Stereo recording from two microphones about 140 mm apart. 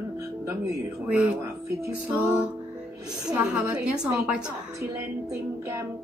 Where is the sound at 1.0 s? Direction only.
5° right (ahead or behind).